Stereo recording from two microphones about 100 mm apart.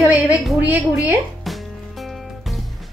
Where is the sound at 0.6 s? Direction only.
15° right (ahead or behind).